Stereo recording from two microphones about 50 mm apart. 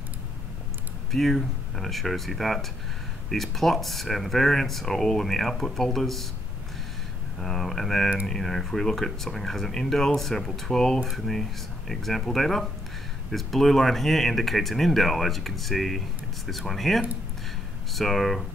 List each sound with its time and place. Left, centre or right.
1.1 s speech: centre
7.4 s speech: centre